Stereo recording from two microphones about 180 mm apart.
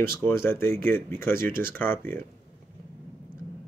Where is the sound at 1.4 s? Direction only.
55° right (ahead or behind).